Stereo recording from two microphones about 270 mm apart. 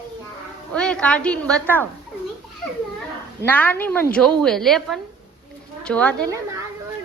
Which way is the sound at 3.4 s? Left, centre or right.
Centre.